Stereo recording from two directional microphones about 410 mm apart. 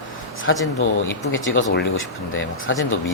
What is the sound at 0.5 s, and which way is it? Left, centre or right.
A man's voice, left.